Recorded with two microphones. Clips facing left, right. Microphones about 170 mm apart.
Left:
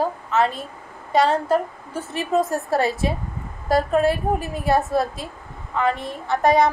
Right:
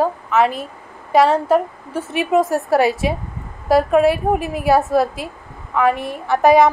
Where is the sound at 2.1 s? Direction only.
75° right (ahead or behind).